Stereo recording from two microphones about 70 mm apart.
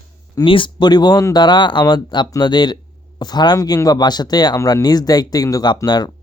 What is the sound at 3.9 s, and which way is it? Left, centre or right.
Speech, left.